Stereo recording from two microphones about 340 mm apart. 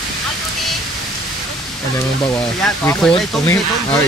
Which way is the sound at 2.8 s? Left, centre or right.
Centre.